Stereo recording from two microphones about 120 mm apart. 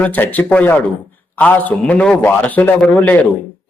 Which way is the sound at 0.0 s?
15° left (ahead or behind).